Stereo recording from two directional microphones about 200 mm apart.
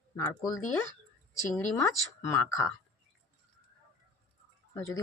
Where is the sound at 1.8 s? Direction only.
15° left (ahead or behind).